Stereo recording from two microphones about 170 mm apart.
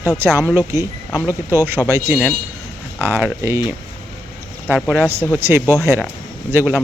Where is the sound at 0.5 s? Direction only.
15° right (ahead or behind).